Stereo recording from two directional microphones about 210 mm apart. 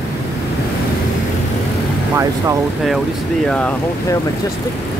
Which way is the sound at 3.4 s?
5° left (ahead or behind).